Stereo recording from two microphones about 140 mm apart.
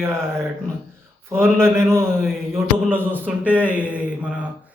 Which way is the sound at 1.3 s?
20° right (ahead or behind).